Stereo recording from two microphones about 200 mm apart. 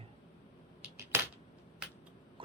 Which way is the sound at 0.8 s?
10° right (ahead or behind).